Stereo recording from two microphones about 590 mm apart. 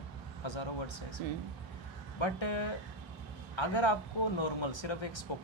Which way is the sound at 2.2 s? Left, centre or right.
Left.